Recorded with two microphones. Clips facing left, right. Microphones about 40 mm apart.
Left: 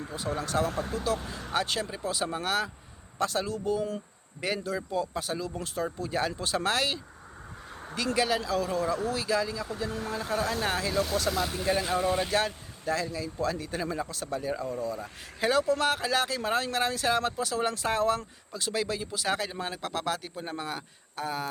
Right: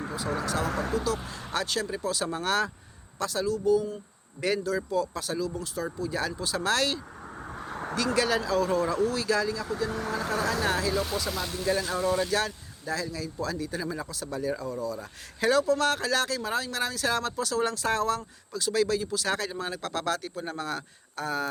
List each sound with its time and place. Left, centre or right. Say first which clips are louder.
0.9 s speech: right 4 dB; left
1.5 s speech: even; left; by 2.6 s centre
3.2 s speech: right 1 dB; left
4.4 s speech: right 4 dB; centre; by 6.7 s left
6.7 s speech: right 3 dB; centre
7.7 s a sound: right 9 dB; right
7.9 s speech: right 1 dB; centre
8.4 s speech: right 3 dB; centre
9.9 s speech: right 2 dB; right
10.6 s speech: right 2 dB; left
10.9 s speech: left 2 dB; centre
11.5 s speech: even; left
15.4 s speech: right 2 dB; centre
16.4 s speech: left 2 dB; left; by 21.4 s centre